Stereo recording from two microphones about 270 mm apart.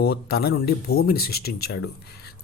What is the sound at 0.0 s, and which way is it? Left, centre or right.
Speech, left.